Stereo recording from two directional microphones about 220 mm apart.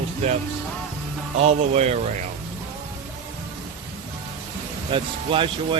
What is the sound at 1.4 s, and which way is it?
Speech, 30° right (ahead or behind).